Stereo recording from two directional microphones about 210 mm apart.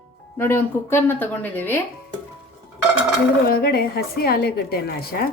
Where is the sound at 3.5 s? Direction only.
45° left (ahead or behind).